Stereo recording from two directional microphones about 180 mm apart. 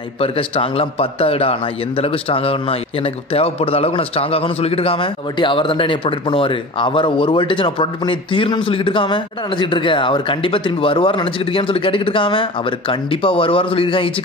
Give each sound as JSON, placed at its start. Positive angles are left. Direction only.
{"t": 0.2, "sound": "a man's voice", "side_deg": 30}